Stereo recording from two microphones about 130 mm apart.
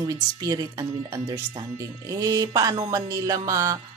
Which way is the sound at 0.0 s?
30° right (ahead or behind).